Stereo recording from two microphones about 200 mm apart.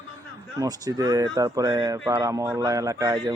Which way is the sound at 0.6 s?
15° right (ahead or behind).